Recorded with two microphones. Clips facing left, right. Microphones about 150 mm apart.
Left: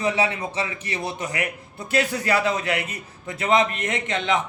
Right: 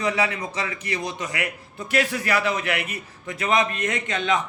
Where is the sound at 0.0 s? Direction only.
30° left (ahead or behind).